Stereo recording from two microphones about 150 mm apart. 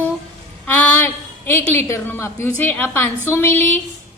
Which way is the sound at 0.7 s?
15° left (ahead or behind).